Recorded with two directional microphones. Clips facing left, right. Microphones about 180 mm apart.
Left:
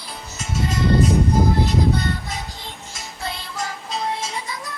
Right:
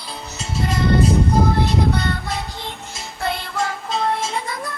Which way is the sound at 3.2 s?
60° right (ahead or behind).